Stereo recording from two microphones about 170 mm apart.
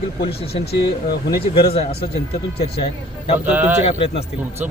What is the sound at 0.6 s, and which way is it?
Speech, 70° left (ahead or behind).